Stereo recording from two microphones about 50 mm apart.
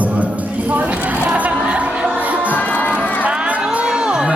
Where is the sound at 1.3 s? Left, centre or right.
Right.